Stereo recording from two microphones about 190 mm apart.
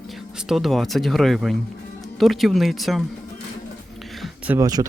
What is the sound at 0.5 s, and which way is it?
Speech, centre (ahead or behind).